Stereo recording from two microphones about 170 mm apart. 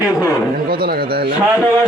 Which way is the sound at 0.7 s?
60° right (ahead or behind).